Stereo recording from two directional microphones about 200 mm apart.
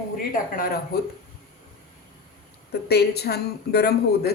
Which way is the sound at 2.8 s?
55° left (ahead or behind).